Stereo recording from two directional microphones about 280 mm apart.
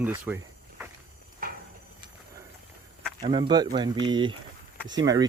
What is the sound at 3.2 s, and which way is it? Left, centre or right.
Speech, centre.